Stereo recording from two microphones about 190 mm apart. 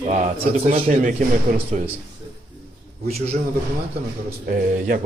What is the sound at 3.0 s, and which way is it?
Speech, 35° right (ahead or behind).